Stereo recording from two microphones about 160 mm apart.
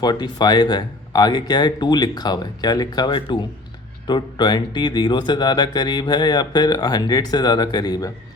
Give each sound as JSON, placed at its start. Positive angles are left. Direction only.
{"t": 0.0, "sound": "speech", "side_deg": 25}